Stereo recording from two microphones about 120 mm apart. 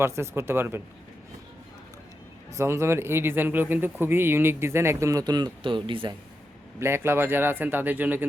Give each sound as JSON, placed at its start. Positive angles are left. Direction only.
{"t": 0.0, "sound": "speech", "side_deg": -20}
{"t": 2.6, "sound": "speech", "side_deg": -25}
{"t": 6.7, "sound": "speech", "side_deg": -20}